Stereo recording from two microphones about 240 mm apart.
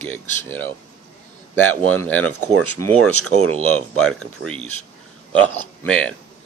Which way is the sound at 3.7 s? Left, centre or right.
Centre.